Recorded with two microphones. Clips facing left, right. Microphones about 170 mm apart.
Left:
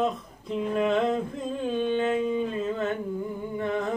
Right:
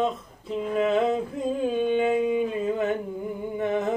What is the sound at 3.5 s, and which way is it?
Music, 20° right (ahead or behind).